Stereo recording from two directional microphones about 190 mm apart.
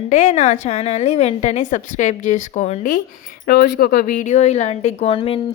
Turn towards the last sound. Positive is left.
turn(degrees=30)  # may be behind; listen again after turning